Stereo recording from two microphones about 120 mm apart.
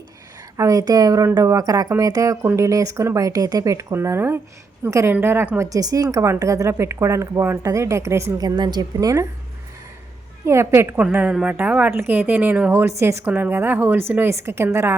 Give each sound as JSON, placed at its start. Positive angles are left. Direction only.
{"t": 0.5, "sound": "a woman's voice", "side_deg": -30}
{"t": 10.4, "sound": "a woman's voice", "side_deg": -20}
{"t": 10.9, "sound": "a woman's voice", "side_deg": -10}